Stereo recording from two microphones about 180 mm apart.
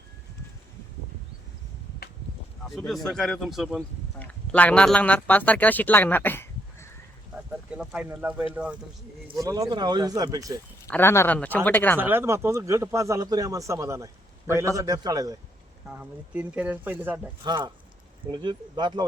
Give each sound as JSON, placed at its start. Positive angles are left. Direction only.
{"t": 2.6, "sound": "speech", "side_deg": 0}
{"t": 7.7, "sound": "a man's voice", "side_deg": -5}
{"t": 9.3, "sound": "speech", "side_deg": -20}
{"t": 10.8, "sound": "speech", "side_deg": 15}
{"t": 11.9, "sound": "a man's voice", "side_deg": -10}
{"t": 15.9, "sound": "a man's voice", "side_deg": -10}
{"t": 17.4, "sound": "speech", "side_deg": -25}